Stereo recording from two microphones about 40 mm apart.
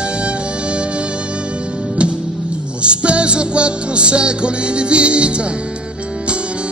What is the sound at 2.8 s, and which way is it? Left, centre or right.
Music, right.